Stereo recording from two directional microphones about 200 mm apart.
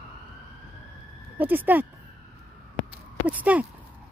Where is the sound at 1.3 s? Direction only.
10° right (ahead or behind).